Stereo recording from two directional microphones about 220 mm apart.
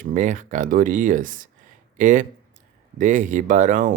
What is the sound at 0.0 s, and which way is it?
Speech, 35° right (ahead or behind).